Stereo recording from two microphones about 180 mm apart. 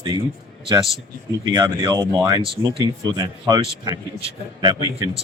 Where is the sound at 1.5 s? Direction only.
20° right (ahead or behind).